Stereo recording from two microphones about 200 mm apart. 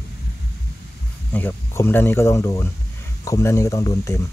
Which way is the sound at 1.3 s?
10° left (ahead or behind).